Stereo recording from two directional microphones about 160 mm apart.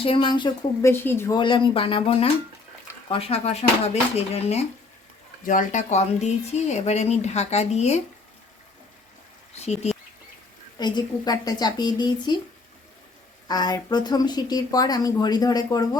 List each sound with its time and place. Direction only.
0.0 s speech: 30° left (ahead or behind)
0.9 s speech: 15° left (ahead or behind)
1.4 s speech: 30° left (ahead or behind)
5.5 s speech: 50° left (ahead or behind)
9.6 s speech: 40° left (ahead or behind)
10.8 s speech: 25° left (ahead or behind)
13.5 s speech: 25° left (ahead or behind)